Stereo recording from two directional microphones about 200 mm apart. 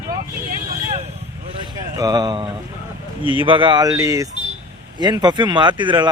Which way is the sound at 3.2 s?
25° left (ahead or behind).